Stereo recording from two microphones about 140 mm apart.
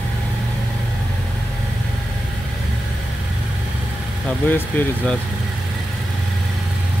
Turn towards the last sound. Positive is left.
turn(degrees=15)  # may be behind; listen again after turning